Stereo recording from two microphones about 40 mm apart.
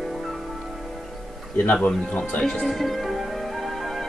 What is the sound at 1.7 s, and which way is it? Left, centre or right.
Speech, left.